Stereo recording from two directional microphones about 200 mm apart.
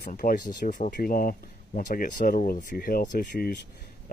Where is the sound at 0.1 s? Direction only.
40° left (ahead or behind).